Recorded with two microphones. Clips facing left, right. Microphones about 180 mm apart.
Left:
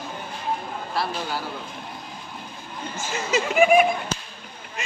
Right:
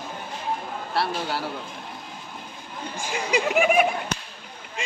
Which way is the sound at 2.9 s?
15° right (ahead or behind).